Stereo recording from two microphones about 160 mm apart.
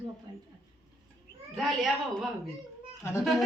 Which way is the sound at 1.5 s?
Centre (ahead or behind).